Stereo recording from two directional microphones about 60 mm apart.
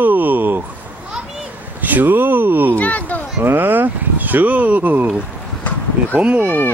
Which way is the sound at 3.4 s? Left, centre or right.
Right.